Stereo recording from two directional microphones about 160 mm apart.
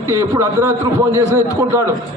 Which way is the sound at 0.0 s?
15° right (ahead or behind).